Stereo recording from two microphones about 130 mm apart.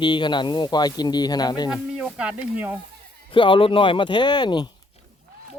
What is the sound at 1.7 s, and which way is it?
Speech, 5° right (ahead or behind).